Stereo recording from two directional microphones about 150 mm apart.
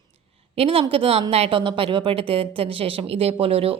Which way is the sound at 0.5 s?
40° right (ahead or behind).